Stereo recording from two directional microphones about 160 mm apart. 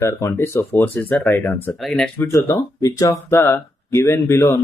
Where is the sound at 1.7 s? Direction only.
Centre (ahead or behind).